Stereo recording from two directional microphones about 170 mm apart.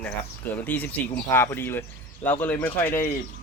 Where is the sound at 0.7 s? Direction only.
10° left (ahead or behind).